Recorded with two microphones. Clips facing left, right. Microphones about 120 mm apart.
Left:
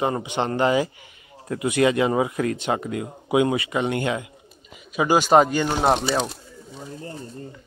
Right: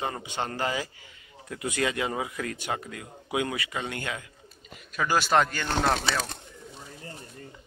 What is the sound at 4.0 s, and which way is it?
Speech, 25° left (ahead or behind).